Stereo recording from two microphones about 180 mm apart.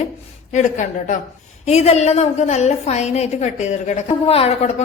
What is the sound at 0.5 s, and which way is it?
A woman's voice, 40° left (ahead or behind).